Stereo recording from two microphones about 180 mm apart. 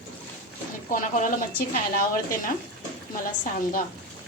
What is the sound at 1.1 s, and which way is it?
Speech, 45° left (ahead or behind).